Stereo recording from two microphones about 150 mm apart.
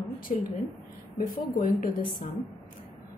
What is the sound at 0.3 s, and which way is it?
Speech, 55° left (ahead or behind).